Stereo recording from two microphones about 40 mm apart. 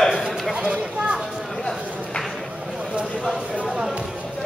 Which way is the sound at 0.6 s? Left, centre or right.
Right.